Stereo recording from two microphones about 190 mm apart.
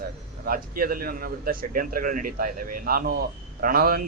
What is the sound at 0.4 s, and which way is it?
A man's voice, 50° right (ahead or behind).